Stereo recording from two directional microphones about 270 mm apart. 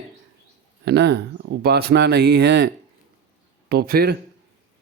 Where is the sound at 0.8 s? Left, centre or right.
Right.